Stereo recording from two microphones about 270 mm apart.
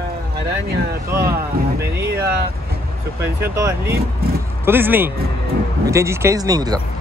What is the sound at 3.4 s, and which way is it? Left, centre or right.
Speech, centre.